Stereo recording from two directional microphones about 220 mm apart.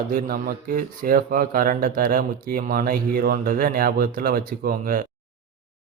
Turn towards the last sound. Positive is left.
turn(degrees=-40)  # may be behind; listen again after turning